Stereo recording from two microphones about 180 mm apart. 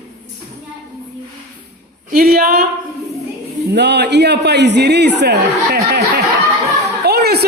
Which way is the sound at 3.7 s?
70° right (ahead or behind).